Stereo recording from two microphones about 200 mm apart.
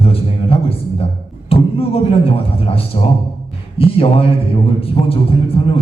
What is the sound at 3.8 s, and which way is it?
Speech, 30° left (ahead or behind).